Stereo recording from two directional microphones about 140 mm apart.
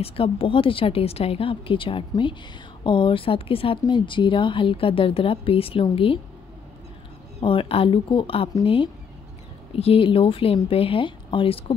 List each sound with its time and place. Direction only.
0.0 s speech: 40° left (ahead or behind)
7.3 s speech: 40° left (ahead or behind)